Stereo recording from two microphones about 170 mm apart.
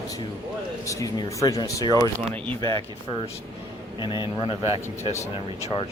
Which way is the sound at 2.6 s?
20° left (ahead or behind).